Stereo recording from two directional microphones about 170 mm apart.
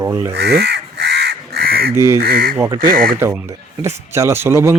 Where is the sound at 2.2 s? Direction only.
60° right (ahead or behind).